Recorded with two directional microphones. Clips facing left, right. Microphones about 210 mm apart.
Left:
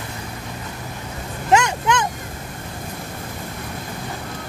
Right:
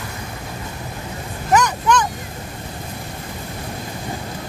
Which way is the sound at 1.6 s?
20° left (ahead or behind).